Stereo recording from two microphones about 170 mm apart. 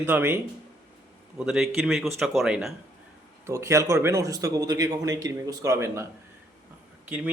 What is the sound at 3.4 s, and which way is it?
A man's voice, 15° right (ahead or behind).